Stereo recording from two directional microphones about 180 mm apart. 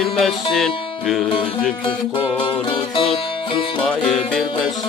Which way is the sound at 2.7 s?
30° left (ahead or behind).